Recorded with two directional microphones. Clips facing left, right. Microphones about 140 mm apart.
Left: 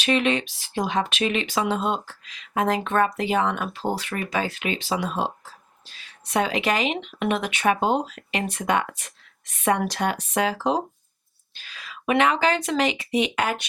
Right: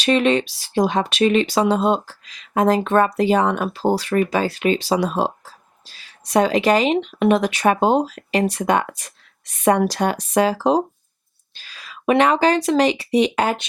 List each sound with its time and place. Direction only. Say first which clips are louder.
0.0 s speech: right 5 dB; 40° right (ahead or behind)